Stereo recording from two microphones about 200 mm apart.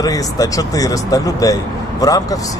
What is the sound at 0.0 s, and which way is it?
Speech, 20° left (ahead or behind).